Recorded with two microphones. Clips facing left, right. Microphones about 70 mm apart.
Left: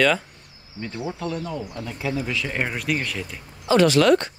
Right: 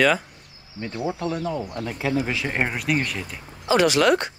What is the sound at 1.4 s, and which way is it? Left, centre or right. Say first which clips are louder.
Speech: right 3 dB; right.